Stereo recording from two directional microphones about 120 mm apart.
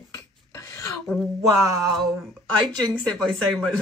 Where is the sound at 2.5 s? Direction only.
10° left (ahead or behind).